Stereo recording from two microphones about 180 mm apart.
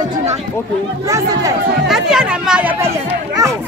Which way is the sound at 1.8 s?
Centre (ahead or behind).